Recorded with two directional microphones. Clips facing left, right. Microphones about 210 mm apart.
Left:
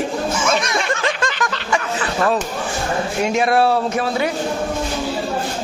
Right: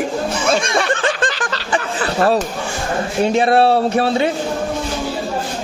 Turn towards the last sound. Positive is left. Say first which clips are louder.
# right 4 dB
turn(degrees=-30)  # may be behind; listen again after turning